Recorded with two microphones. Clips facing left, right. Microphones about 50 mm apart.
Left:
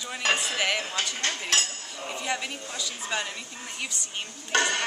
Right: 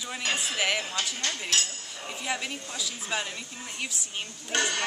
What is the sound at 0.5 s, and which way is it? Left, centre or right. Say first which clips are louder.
Speech: left 1 dB; centre.